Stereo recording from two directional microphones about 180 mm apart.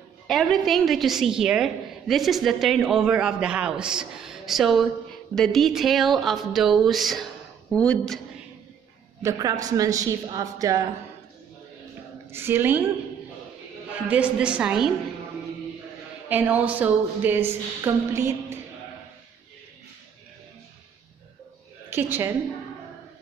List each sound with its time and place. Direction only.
0.3 s a woman's voice: centre (ahead or behind)
9.2 s a woman's voice: 20° right (ahead or behind)
12.3 s a woman's voice: 15° right (ahead or behind)
14.0 s a woman's voice: 5° right (ahead or behind)
16.3 s a woman's voice: 10° right (ahead or behind)
21.9 s a woman's voice: 10° right (ahead or behind)